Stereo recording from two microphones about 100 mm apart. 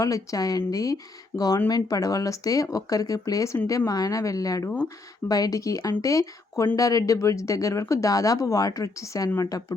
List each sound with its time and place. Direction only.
0.0 s speech: 35° left (ahead or behind)